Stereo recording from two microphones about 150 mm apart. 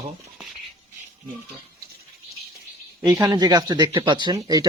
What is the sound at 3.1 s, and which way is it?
Speech, 15° right (ahead or behind).